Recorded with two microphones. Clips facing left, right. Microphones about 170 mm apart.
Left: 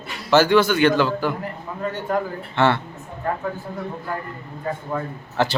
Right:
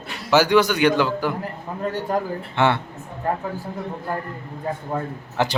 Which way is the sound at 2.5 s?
15° right (ahead or behind).